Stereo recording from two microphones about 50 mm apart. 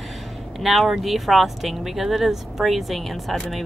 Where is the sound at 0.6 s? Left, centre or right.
Centre.